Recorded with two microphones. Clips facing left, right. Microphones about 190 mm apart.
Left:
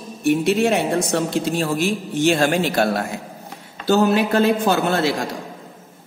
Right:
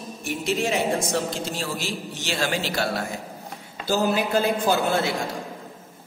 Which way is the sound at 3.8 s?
65° left (ahead or behind).